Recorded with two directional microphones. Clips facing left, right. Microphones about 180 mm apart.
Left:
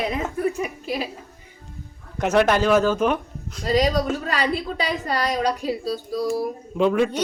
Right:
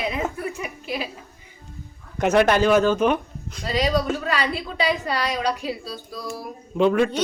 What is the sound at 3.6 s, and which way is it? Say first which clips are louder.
A woman's voice: left 2 dB; 40° left (ahead or behind).